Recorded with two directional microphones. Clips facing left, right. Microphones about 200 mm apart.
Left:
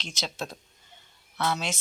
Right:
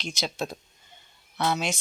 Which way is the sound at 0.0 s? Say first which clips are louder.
Right 4 dB; 10° right (ahead or behind).